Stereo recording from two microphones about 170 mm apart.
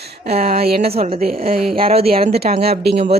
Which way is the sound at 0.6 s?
65° right (ahead or behind).